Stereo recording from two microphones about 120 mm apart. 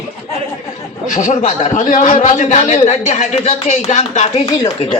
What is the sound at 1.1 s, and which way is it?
A man's voice, 90° left.